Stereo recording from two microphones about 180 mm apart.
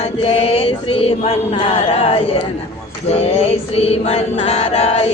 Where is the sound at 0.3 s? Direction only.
30° left (ahead or behind).